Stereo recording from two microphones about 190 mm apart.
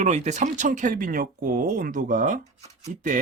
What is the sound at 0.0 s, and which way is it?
Speech, 35° right (ahead or behind).